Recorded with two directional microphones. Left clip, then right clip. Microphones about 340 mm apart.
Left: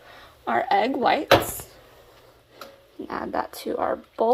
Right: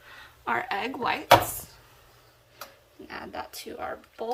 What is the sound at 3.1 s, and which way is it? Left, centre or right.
Speech, left.